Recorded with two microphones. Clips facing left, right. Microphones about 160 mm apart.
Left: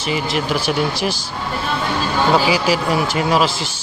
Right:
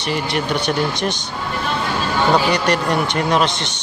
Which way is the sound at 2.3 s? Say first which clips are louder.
Left 1 dB; 5° left (ahead or behind).